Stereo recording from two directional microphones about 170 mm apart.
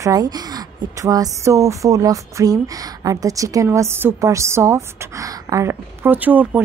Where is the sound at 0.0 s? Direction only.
20° right (ahead or behind).